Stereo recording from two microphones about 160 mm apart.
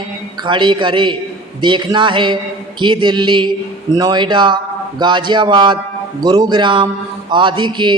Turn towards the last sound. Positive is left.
turn(degrees=-30)  # may be behind; listen again after turning